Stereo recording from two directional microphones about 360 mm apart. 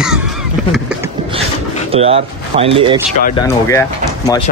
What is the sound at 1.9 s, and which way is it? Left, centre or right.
Speech, centre.